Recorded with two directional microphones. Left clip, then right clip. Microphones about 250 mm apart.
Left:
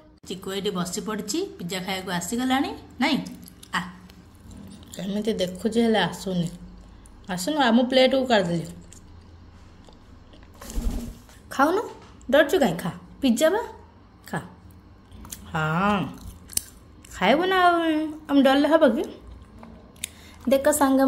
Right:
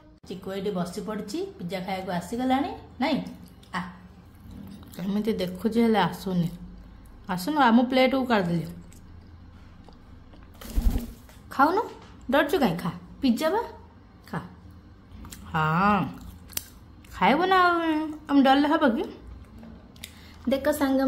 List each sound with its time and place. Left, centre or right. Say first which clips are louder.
0.3 s speech: left 2 dB; centre
4.7 s speech: left 1 dB; centre
11.4 s a sound: even; centre
12.3 s speech: left 4 dB; centre
15.4 s speech: right 1 dB; centre
17.2 s speech: left 1 dB; centre
20.4 s a woman's voice: left 5 dB; centre